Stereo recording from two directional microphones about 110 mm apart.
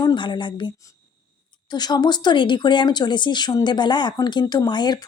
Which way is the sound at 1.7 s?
40° left (ahead or behind).